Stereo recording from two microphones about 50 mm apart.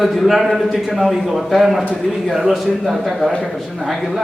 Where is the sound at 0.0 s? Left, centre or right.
Centre.